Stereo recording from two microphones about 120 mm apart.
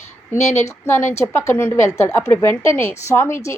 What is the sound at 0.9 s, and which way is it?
A woman's voice, 20° left (ahead or behind).